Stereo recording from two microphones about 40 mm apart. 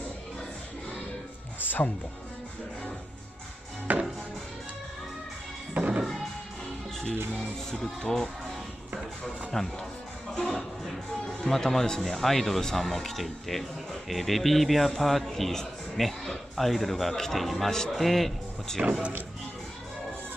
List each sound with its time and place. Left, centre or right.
3.9 s music: right
5.8 s music: right
7.2 s a man's voice: left
9.5 s a man's voice: centre